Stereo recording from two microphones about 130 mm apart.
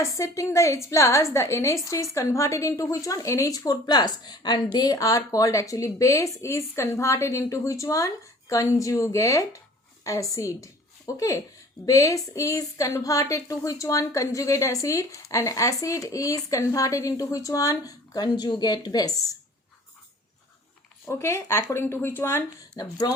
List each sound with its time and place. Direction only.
0.0 s a woman's voice: 25° left (ahead or behind)
21.1 s a woman's voice: 20° left (ahead or behind)
22.7 s speech: 30° left (ahead or behind)